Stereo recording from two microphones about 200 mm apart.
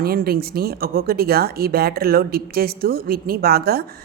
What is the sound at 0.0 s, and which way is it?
Speech, 50° right (ahead or behind).